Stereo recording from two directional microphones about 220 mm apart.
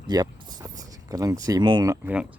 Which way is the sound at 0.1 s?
15° right (ahead or behind).